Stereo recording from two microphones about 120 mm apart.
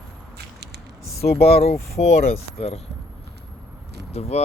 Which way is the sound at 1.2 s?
60° left (ahead or behind).